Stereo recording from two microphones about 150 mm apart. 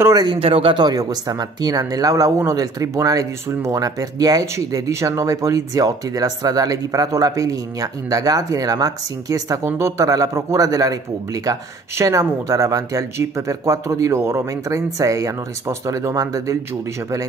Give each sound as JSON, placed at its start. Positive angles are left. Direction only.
{"t": 0.0, "sound": "speech", "side_deg": -25}